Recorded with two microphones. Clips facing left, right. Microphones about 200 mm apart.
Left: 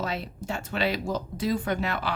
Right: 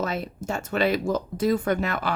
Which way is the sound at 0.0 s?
45° right (ahead or behind).